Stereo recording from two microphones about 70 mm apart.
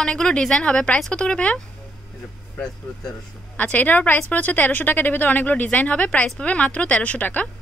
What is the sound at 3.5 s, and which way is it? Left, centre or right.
A woman's voice, left.